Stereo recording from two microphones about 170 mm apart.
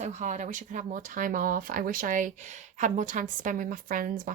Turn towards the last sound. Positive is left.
turn(degrees=-55)  # may be behind; listen again after turning